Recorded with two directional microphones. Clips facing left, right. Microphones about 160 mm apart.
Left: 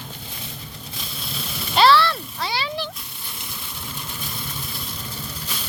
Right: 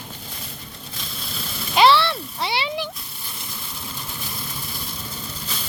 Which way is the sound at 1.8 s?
25° right (ahead or behind).